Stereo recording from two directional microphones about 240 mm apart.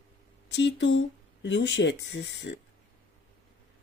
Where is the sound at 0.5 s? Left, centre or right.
Left.